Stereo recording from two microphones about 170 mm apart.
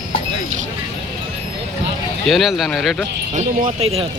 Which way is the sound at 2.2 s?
Centre (ahead or behind).